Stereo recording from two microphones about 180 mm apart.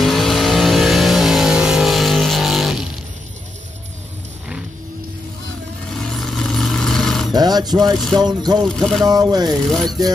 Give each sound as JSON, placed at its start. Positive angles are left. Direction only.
{"t": 0.0, "sound": "vehicle", "side_deg": 0}
{"t": 5.9, "sound": "vehicle", "side_deg": 0}
{"t": 7.3, "sound": "a sound", "side_deg": -20}
{"t": 8.2, "sound": "speech", "side_deg": -20}
{"t": 8.6, "sound": "speech", "side_deg": 0}
{"t": 9.0, "sound": "speech", "side_deg": -20}